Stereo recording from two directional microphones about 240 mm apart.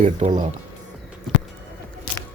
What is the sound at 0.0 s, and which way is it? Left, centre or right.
Speech, right.